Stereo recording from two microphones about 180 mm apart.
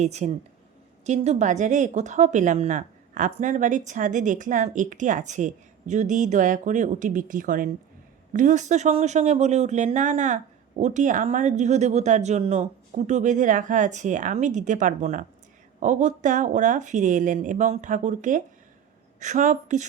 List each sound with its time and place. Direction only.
0.0 s speech: 40° right (ahead or behind)